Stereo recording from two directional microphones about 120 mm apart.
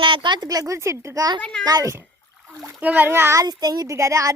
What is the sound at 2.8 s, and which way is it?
A child's voice, 15° right (ahead or behind).